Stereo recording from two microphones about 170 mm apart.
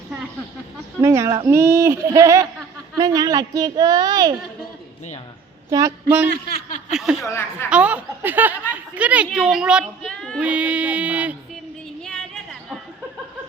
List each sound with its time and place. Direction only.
1.0 s speech: 15° right (ahead or behind)
5.7 s speech: 20° right (ahead or behind)
6.5 s snicker: 50° left (ahead or behind)
6.9 s a woman's voice: 5° right (ahead or behind)
7.2 s speech: 15° left (ahead or behind)
7.7 s a woman's voice: 10° right (ahead or behind)
10.4 s speech: 5° right (ahead or behind)
12.0 s a sound: 5° left (ahead or behind)